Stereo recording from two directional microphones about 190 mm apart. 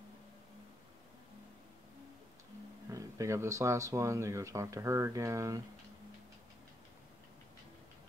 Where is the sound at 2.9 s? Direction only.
15° right (ahead or behind).